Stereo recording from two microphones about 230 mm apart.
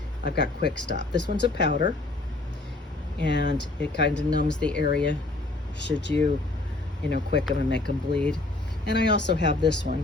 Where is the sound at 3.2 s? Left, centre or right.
Left.